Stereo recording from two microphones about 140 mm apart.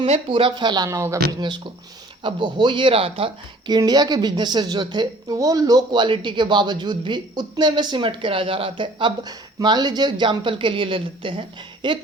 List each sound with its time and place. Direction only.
0.0 s a woman's voice: 40° right (ahead or behind)
0.9 s speech: 20° right (ahead or behind)
1.3 s a woman's voice: 35° right (ahead or behind)
3.8 s a woman's voice: 30° right (ahead or behind)